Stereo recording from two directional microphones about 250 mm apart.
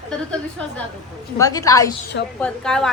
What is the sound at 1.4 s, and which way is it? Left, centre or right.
Speech, centre.